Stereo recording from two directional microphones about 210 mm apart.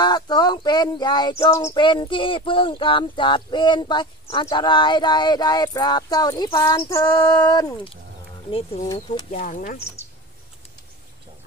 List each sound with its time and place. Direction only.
0.0 s speech: 20° left (ahead or behind)
9.3 s speech: 40° left (ahead or behind)